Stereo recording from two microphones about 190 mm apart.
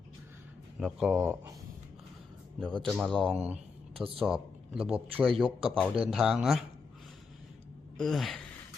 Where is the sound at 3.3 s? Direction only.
35° right (ahead or behind).